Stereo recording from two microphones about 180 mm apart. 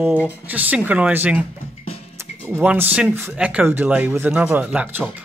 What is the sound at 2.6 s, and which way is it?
Speech, 5° right (ahead or behind).